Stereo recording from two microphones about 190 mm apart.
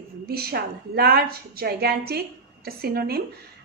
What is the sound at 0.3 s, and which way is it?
A woman's voice, 55° right (ahead or behind).